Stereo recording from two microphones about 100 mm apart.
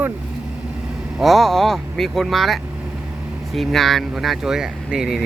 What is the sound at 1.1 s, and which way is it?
Speech, centre (ahead or behind).